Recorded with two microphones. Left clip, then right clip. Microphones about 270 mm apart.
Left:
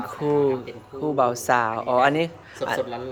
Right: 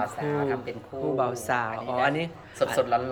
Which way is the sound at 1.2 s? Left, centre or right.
Left.